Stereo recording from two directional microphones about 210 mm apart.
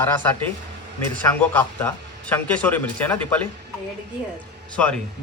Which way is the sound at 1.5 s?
10° left (ahead or behind).